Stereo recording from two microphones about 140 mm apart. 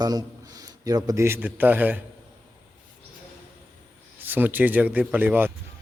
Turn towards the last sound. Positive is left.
turn(degrees=-15)  # may be behind; listen again after turning